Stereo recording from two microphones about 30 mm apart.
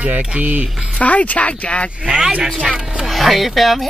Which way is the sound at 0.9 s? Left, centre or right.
Left.